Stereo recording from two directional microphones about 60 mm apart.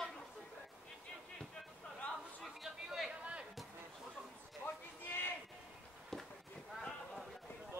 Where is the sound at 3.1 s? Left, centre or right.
Centre.